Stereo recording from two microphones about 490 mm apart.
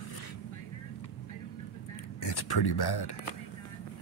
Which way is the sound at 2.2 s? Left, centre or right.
Left.